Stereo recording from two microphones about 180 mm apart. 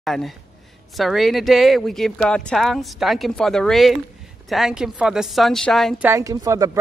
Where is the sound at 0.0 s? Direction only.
Centre (ahead or behind).